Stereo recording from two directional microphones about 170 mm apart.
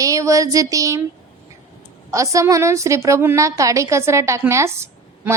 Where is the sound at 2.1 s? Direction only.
20° right (ahead or behind).